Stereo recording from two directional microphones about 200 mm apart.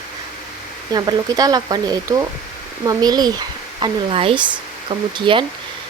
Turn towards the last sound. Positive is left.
turn(degrees=-25)  # may be behind; listen again after turning